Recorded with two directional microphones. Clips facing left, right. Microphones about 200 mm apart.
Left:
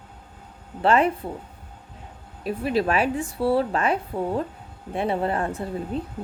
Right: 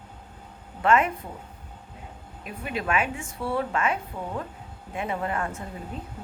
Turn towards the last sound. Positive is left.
turn(degrees=35)  # may be behind; listen again after turning